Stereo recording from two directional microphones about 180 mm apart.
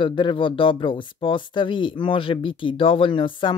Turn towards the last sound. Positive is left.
turn(degrees=30)  # may be behind; listen again after turning